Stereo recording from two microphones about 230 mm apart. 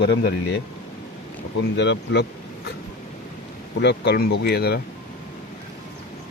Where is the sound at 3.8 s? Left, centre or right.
Left.